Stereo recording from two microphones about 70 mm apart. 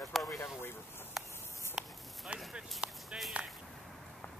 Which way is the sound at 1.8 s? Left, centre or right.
Centre.